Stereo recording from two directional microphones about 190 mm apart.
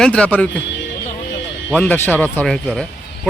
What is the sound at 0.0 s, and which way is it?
Speech, 5° left (ahead or behind).